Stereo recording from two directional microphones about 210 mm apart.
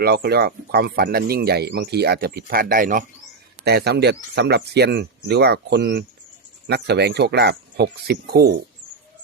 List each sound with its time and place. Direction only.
0.0 s speech: 50° right (ahead or behind)